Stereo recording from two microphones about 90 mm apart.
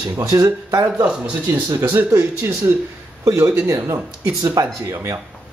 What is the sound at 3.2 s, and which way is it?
Speech, 40° right (ahead or behind).